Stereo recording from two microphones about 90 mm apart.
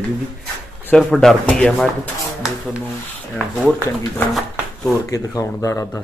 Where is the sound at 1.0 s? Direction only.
5° left (ahead or behind).